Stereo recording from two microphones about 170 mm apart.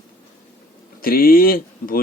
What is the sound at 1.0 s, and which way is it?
Speech, 60° left (ahead or behind).